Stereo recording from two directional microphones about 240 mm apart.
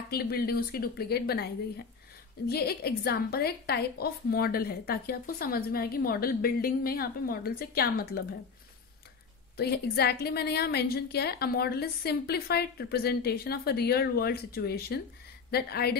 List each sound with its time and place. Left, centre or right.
0.1 s a woman's voice: left
9.6 s a woman's voice: left